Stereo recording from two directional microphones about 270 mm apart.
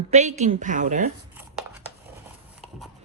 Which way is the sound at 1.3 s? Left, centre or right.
Centre.